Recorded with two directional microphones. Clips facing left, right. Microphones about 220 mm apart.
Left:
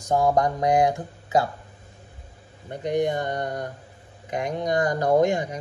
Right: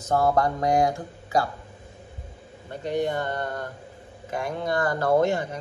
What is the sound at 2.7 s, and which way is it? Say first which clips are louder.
Speech: left 2 dB; 15° left (ahead or behind).